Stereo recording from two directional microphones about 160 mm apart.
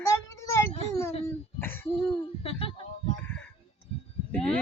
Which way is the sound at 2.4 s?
35° left (ahead or behind).